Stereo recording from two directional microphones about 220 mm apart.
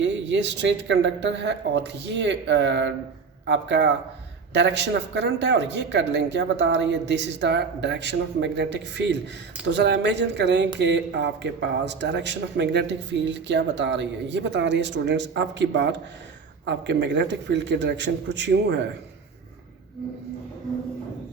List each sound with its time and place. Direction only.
0.0 s a man's voice: 50° right (ahead or behind)